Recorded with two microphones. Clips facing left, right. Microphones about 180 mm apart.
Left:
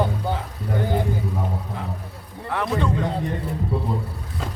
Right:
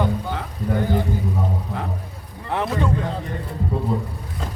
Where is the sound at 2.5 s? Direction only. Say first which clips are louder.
Right 1 dB; 20° right (ahead or behind).